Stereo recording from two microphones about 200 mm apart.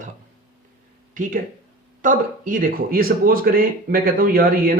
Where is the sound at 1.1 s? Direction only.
40° right (ahead or behind).